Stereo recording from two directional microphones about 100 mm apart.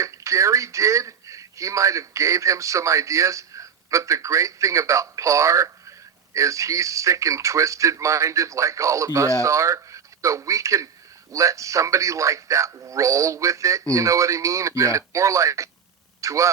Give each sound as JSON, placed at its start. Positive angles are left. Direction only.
{"t": 0.0, "sound": "speech", "side_deg": -30}